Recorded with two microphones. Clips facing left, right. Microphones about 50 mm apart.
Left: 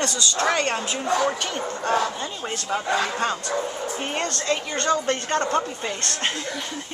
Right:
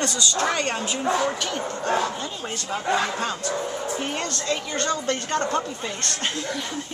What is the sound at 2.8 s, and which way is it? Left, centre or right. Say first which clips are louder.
Speech: right 2 dB; centre.